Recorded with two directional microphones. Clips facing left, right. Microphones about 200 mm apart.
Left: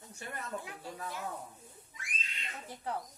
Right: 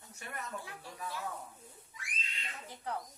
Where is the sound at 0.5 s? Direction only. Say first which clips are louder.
Left 3 dB; 20° left (ahead or behind).